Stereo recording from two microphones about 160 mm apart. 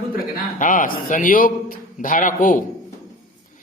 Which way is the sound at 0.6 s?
55° left (ahead or behind).